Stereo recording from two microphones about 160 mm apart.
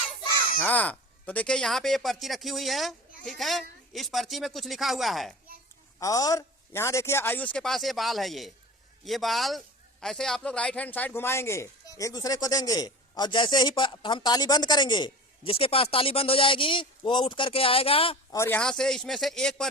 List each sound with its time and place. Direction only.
0.6 s speech: 10° left (ahead or behind)
6.0 s a man's voice: 20° left (ahead or behind)
18.3 s speech: 15° left (ahead or behind)